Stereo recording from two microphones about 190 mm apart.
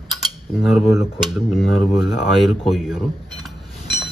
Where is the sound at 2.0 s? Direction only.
Centre (ahead or behind).